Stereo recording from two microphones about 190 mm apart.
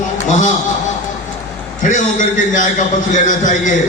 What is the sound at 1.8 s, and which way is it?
A man's voice, 40° left (ahead or behind).